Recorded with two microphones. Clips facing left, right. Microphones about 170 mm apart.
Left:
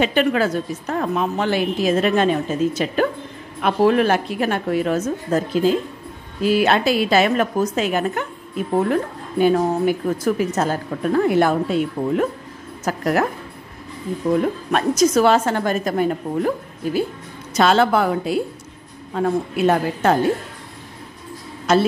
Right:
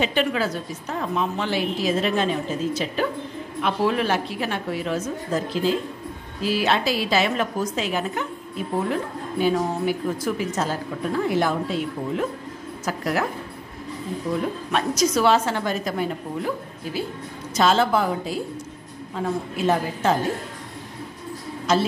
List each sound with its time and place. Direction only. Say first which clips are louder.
0.0 s a woman's voice: left 5 dB; 55° left (ahead or behind)
14.7 s a woman's voice: left 5 dB; 50° left (ahead or behind)
17.6 s a woman's voice: left 3 dB; 65° left (ahead or behind)
21.7 s a woman's voice: left 4 dB; 60° left (ahead or behind)